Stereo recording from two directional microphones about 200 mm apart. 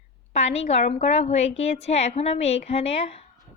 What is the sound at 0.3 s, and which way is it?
A woman's voice, 30° left (ahead or behind).